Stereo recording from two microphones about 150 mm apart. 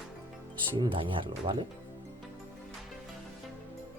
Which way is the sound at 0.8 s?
35° right (ahead or behind).